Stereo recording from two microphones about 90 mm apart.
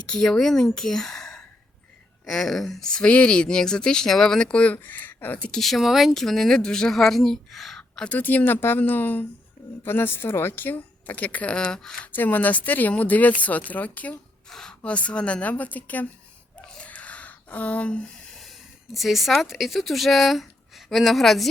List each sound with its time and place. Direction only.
0.0 s speech: 10° left (ahead or behind)
0.8 s a sound: 5° left (ahead or behind)
2.2 s speech: 5° left (ahead or behind); by 5.5 s 20° left (ahead or behind)
5.5 s a woman's voice: centre (ahead or behind)
12.1 s speech: 20° left (ahead or behind)
14.5 s speech: 5° left (ahead or behind)
16.6 s a sound: 10° left (ahead or behind)
18.9 s speech: centre (ahead or behind)